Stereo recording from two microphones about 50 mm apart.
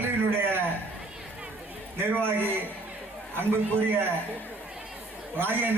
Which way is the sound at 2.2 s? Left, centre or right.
Right.